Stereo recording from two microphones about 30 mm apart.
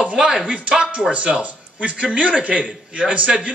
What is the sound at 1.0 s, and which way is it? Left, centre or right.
A man's voice, right.